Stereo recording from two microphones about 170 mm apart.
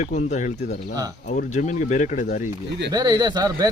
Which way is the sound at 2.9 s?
20° right (ahead or behind).